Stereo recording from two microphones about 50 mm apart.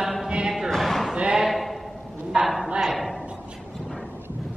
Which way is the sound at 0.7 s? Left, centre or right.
Centre.